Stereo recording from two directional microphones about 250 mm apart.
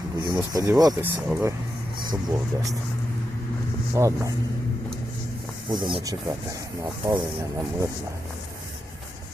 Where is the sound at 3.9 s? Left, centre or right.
Centre.